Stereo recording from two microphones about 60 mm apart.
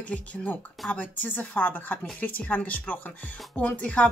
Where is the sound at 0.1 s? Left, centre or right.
Left.